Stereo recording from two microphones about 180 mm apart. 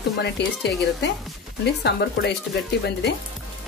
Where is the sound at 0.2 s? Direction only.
65° left (ahead or behind).